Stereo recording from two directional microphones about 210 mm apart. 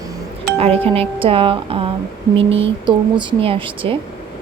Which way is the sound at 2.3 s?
60° right (ahead or behind).